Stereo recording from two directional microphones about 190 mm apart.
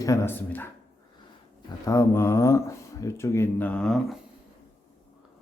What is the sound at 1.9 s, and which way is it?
Speech, 15° left (ahead or behind).